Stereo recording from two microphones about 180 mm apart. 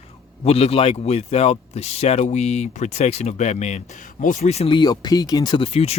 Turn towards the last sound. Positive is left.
turn(degrees=35)  # may be behind; listen again after turning